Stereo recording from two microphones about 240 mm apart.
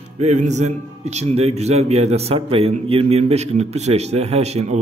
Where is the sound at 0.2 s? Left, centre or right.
Right.